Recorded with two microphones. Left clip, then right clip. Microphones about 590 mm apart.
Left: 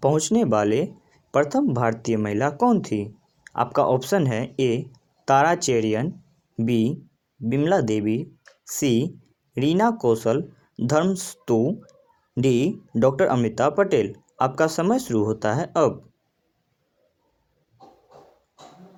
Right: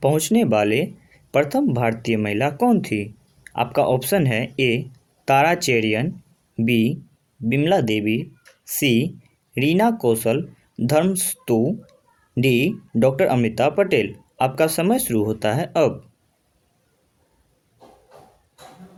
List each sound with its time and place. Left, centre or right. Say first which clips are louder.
0.0 s speech: right 2 dB; right